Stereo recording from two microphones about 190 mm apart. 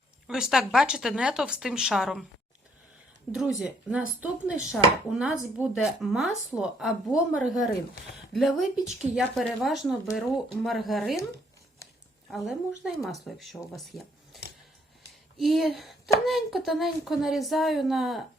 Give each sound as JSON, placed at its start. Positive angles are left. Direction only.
{"t": 0.3, "sound": "a woman's voice", "side_deg": -5}
{"t": 3.3, "sound": "a woman's voice", "side_deg": -5}
{"t": 12.3, "sound": "a woman's voice", "side_deg": 0}